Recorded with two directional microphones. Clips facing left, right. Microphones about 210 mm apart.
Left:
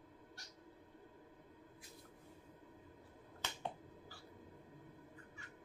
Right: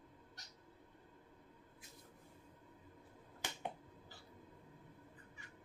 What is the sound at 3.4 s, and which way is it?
Finger snapping, 15° right (ahead or behind).